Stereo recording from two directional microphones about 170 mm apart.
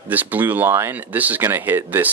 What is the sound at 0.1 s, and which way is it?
Speech, 10° right (ahead or behind).